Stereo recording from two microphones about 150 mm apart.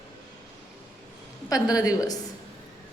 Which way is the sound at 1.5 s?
25° left (ahead or behind).